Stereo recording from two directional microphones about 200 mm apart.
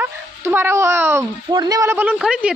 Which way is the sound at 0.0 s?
10° right (ahead or behind).